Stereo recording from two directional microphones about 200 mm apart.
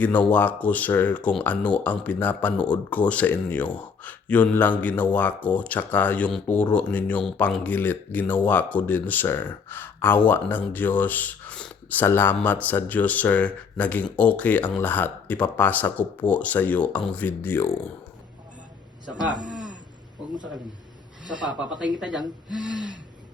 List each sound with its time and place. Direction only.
0.0 s speech: 10° left (ahead or behind)
21.4 s speech: 5° right (ahead or behind)